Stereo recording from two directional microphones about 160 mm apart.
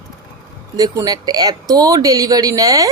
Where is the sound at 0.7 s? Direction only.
25° right (ahead or behind).